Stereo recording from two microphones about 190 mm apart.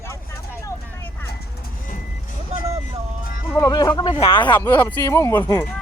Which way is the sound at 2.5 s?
35° right (ahead or behind).